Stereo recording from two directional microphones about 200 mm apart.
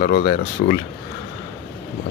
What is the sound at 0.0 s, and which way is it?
Speech, 50° left (ahead or behind).